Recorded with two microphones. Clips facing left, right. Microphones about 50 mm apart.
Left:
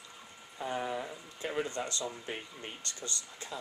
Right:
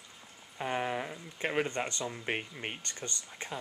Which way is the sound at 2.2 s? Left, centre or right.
Right.